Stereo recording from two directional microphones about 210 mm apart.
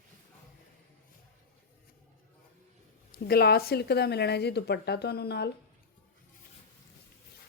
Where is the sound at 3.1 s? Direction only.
50° left (ahead or behind).